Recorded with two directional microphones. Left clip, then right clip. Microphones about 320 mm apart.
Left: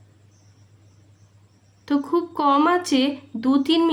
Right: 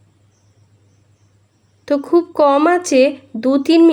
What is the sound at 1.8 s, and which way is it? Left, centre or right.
Speech, centre.